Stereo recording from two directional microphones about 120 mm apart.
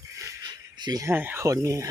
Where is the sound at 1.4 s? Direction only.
25° right (ahead or behind).